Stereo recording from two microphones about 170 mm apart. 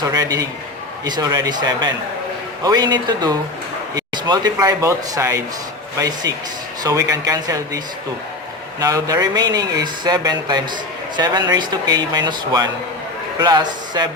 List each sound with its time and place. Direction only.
0.0 s speech: 20° right (ahead or behind)
8.8 s speech: 20° right (ahead or behind)